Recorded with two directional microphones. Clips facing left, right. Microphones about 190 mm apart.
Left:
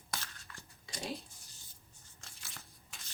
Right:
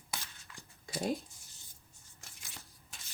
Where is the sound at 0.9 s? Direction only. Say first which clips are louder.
Right 7 dB; 50° right (ahead or behind).